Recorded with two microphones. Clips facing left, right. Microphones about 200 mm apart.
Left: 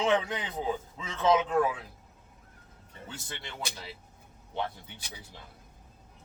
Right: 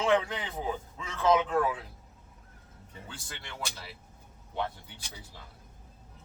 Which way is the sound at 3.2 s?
20° left (ahead or behind).